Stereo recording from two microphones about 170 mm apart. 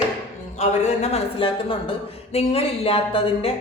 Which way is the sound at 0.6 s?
40° left (ahead or behind).